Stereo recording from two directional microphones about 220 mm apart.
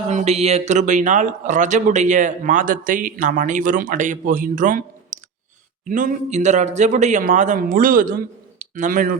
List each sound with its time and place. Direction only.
0.1 s speech: 30° right (ahead or behind)